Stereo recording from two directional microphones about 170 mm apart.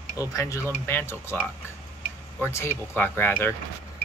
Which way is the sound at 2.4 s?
15° left (ahead or behind).